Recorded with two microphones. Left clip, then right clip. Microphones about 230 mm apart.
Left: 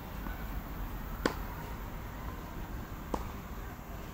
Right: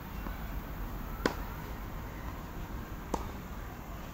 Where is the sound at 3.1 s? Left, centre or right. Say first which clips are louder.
Right 1 dB; right.